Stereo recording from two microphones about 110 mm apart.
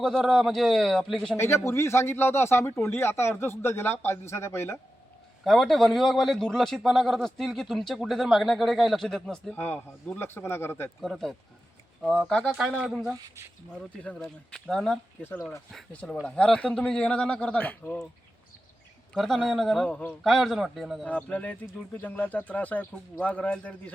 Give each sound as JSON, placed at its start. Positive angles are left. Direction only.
{"t": 0.0, "sound": "a man's voice", "side_deg": 5}
{"t": 1.4, "sound": "speech", "side_deg": 25}
{"t": 5.5, "sound": "a man's voice", "side_deg": 0}
{"t": 9.6, "sound": "speech", "side_deg": 20}
{"t": 11.0, "sound": "a man's voice", "side_deg": 0}
{"t": 14.0, "sound": "a man's voice", "side_deg": 10}
{"t": 19.1, "sound": "a man's voice", "side_deg": 5}
{"t": 20.2, "sound": "a man's voice", "side_deg": 0}
{"t": 21.0, "sound": "speech", "side_deg": 10}